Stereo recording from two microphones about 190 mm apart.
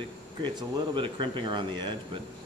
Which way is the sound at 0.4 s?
25° right (ahead or behind).